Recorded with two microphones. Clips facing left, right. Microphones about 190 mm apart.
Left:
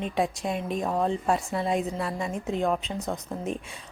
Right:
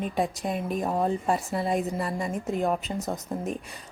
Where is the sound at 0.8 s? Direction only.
15° right (ahead or behind).